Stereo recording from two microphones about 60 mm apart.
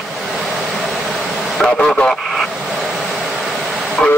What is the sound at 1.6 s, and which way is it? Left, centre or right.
Speech, centre.